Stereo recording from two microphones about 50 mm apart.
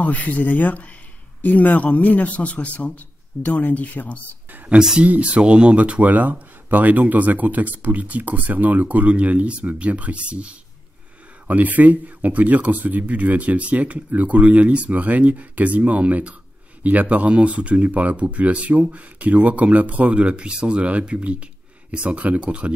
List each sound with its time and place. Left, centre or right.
0.0 s a man's voice: left
5.0 s speech: right
11.4 s speech: right